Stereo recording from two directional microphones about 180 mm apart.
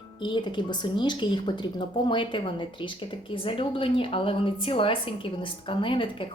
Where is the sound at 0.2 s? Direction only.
25° left (ahead or behind).